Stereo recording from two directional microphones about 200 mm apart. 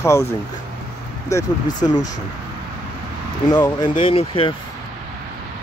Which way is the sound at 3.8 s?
25° left (ahead or behind).